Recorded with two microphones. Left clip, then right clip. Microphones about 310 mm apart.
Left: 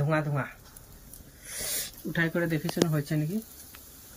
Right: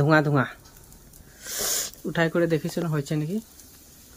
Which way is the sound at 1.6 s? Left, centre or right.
Centre.